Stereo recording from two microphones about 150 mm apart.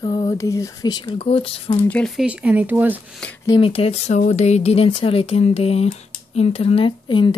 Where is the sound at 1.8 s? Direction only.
5° left (ahead or behind); by 3.1 s 10° right (ahead or behind).